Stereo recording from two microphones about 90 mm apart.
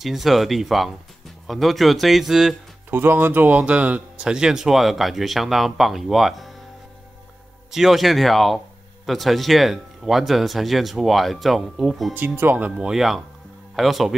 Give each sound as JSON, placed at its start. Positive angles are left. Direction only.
{"t": 0.0, "sound": "speech", "side_deg": 0}
{"t": 2.9, "sound": "speech", "side_deg": -25}
{"t": 7.7, "sound": "speech", "side_deg": 0}
{"t": 12.1, "sound": "speech", "side_deg": -20}
{"t": 12.7, "sound": "speech", "side_deg": -5}